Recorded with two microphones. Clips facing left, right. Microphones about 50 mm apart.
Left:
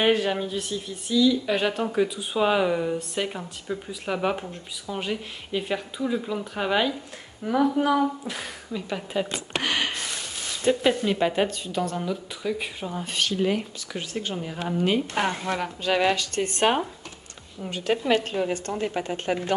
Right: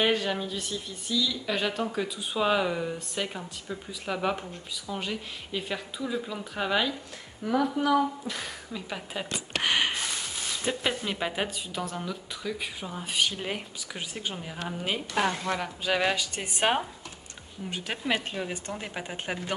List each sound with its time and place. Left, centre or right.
0.1 s speech: centre
7.4 s a sound: left
7.9 s speech: centre
9.6 s a sound: centre
10.6 s speech: centre
12.0 s speech: centre
14.3 s a woman's voice: centre
19.3 s a woman's voice: centre